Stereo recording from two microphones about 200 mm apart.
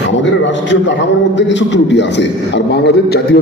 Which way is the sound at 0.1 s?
65° left (ahead or behind).